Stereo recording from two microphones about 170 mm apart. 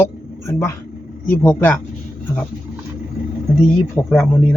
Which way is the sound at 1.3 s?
15° left (ahead or behind).